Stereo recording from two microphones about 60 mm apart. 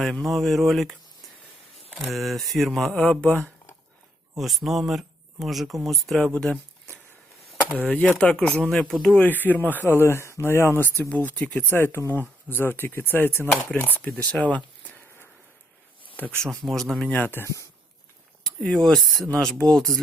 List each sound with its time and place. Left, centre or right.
0.0 s speech: centre
2.0 s speech: centre
2.9 s speech: centre
4.4 s speech: centre
6.3 s speech: centre
8.2 s speech: centre
9.1 s speech: left
11.1 s speech: left
11.7 s speech: left
14.1 s speech: centre
16.1 s speech: left
16.5 s speech: centre
17.2 s speech: left
18.4 s speech: centre